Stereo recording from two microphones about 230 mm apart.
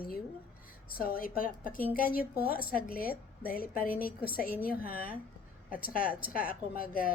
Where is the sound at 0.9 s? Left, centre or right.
Left.